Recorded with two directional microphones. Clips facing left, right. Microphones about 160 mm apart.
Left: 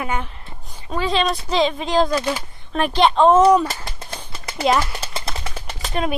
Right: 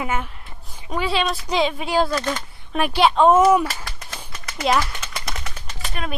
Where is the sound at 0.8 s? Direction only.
10° right (ahead or behind).